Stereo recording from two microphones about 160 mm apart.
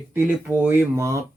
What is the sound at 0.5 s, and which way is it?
Speech, 15° right (ahead or behind).